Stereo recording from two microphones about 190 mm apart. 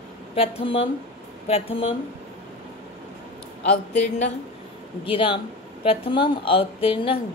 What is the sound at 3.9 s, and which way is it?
Speech, 35° left (ahead or behind).